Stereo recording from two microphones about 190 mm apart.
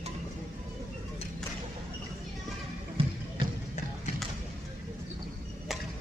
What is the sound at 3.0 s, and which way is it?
Music, 30° right (ahead or behind).